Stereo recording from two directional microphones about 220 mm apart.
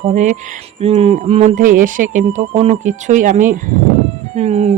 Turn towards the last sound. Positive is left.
turn(degrees=-30)  # may be behind; listen again after turning